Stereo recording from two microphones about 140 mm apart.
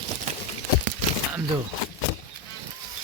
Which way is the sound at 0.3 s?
50° right (ahead or behind).